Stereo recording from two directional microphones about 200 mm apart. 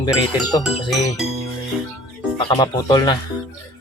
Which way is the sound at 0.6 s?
Centre (ahead or behind).